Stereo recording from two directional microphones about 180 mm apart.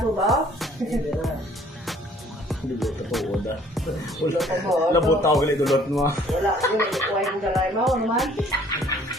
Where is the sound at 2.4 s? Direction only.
Centre (ahead or behind).